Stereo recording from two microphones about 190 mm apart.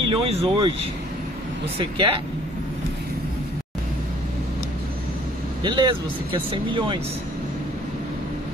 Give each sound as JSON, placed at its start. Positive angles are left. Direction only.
{"t": 0.1, "sound": "speech", "side_deg": -30}
{"t": 1.8, "sound": "speech", "side_deg": -30}
{"t": 5.6, "sound": "speech", "side_deg": -25}